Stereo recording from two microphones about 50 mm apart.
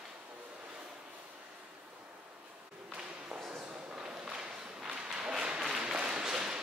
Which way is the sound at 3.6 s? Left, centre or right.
Centre.